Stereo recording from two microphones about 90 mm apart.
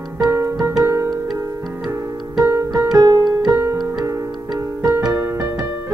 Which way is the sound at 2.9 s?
45° right (ahead or behind).